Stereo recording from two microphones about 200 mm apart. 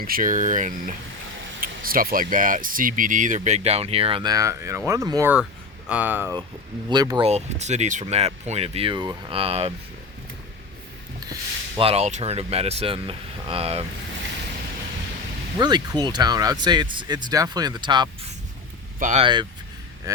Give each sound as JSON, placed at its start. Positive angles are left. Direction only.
{"t": 0.0, "sound": "speech", "side_deg": -45}
{"t": 6.8, "sound": "speech", "side_deg": -20}
{"t": 7.3, "sound": "speech", "side_deg": -35}
{"t": 11.8, "sound": "speech", "side_deg": -30}
{"t": 15.5, "sound": "speech", "side_deg": -20}
{"t": 18.9, "sound": "speech", "side_deg": -40}
{"t": 19.2, "sound": "speech", "side_deg": -20}